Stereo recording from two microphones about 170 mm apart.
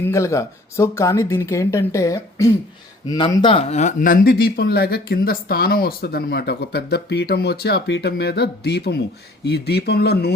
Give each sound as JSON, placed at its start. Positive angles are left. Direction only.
{"t": 0.0, "sound": "speech", "side_deg": 15}